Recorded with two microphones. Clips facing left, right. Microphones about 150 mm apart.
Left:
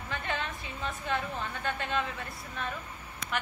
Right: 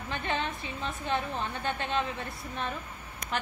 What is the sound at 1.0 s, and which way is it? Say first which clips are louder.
A woman's voice: right 3 dB; 25° right (ahead or behind).